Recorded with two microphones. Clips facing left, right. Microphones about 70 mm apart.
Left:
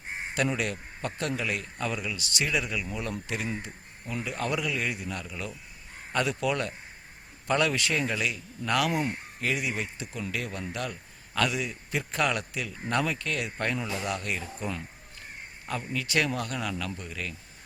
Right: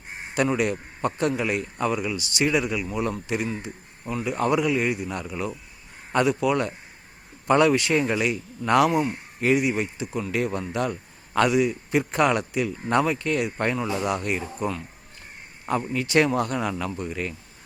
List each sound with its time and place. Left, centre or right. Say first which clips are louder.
0.3 s a man's voice: right 6 dB; centre
8.9 s a man's voice: right 5 dB; centre